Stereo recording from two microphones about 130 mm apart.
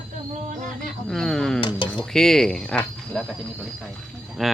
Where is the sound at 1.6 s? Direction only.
40° left (ahead or behind).